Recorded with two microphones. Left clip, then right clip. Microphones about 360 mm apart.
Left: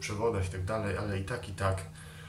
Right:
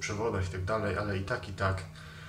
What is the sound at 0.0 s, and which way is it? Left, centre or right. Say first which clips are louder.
Speech: left 1 dB; centre.